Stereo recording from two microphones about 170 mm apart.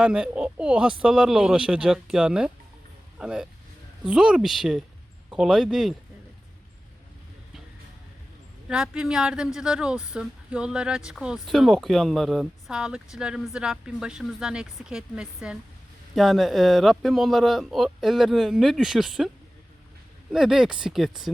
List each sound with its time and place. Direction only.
0.0 s speech: 5° right (ahead or behind)
8.7 s speech: 5° right (ahead or behind)
20.3 s speech: centre (ahead or behind)